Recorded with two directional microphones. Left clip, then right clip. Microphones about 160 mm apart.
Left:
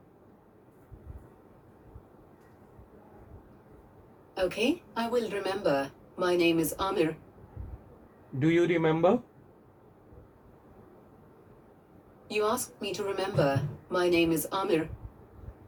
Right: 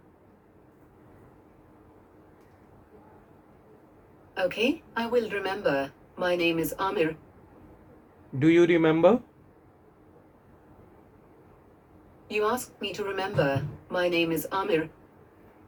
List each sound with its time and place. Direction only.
4.4 s a woman's voice: 5° left (ahead or behind)
8.4 s speech: 90° right
12.5 s a woman's voice: 5° left (ahead or behind)